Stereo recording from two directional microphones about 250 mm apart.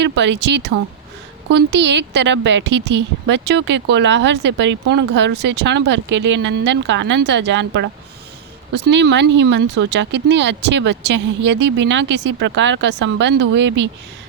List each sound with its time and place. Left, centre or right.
0.0 s a woman's voice: right